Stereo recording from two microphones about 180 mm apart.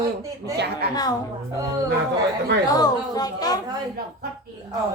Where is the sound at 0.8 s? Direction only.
60° right (ahead or behind).